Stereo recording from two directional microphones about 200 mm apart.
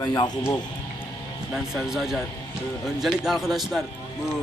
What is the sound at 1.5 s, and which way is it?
Speech, centre (ahead or behind).